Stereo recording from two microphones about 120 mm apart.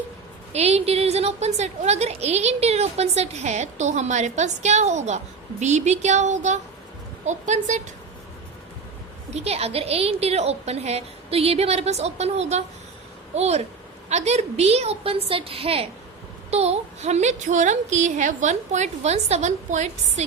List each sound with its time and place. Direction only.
0.5 s a woman's voice: 60° right (ahead or behind); by 7.8 s 85° right
9.3 s a woman's voice: 60° right (ahead or behind); by 20.2 s 75° right (ahead or behind)